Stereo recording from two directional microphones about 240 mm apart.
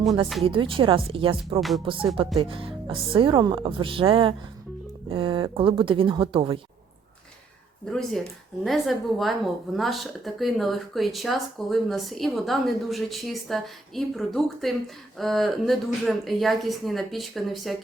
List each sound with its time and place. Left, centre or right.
0.4 s speech: right
7.9 s speech: centre